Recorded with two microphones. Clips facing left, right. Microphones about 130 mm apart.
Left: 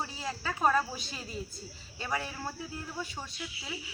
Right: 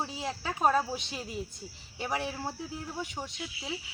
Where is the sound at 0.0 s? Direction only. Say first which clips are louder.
Right 2 dB; 20° right (ahead or behind).